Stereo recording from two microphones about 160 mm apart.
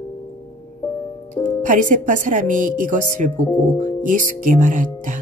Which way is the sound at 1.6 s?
55° right (ahead or behind).